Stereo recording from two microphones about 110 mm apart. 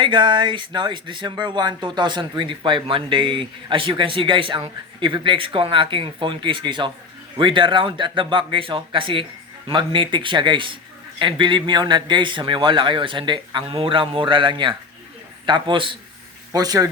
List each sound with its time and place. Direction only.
0.0 s speech: 50° right (ahead or behind)
16.5 s speech: 35° right (ahead or behind)